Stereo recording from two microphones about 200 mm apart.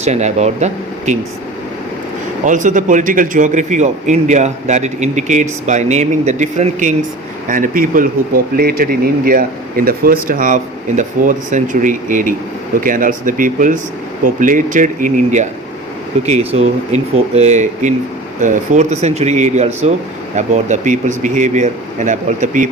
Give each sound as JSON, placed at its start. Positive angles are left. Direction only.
{"t": 0.0, "sound": "speech", "side_deg": -35}
{"t": 2.4, "sound": "speech", "side_deg": -40}